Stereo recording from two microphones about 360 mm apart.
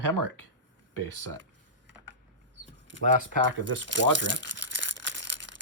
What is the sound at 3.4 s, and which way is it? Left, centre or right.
Crumpling, right.